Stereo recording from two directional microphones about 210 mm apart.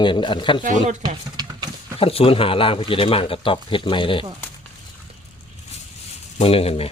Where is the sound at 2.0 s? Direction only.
25° left (ahead or behind).